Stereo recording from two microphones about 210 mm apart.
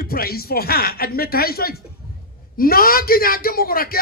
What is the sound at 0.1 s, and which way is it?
A man's voice, 45° left (ahead or behind).